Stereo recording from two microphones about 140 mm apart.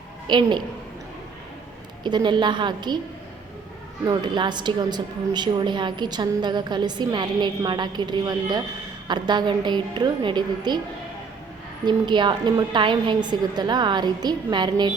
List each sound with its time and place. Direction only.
0.3 s a woman's voice: 35° right (ahead or behind)
2.0 s a woman's voice: 30° right (ahead or behind)
4.0 s a woman's voice: 30° right (ahead or behind)
11.9 s a woman's voice: 35° right (ahead or behind)